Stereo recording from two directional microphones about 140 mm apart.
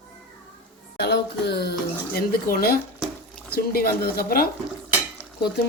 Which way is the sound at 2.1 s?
90° left.